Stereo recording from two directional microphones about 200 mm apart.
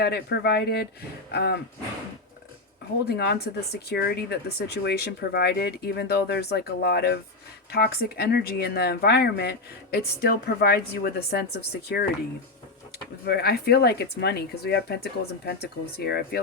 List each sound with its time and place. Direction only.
0.0 s speech: 55° left (ahead or behind)
3.1 s speech: 55° left (ahead or behind)
13.2 s speech: 50° left (ahead or behind)